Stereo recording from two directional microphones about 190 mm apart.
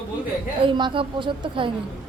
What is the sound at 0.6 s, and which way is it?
A woman's voice, 25° right (ahead or behind).